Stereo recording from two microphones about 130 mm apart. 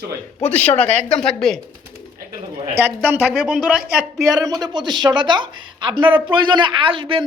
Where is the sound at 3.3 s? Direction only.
Centre (ahead or behind).